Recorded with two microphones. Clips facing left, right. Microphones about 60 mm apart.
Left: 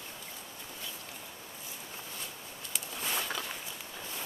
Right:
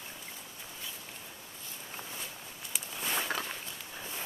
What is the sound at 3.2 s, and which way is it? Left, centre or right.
Walk, centre.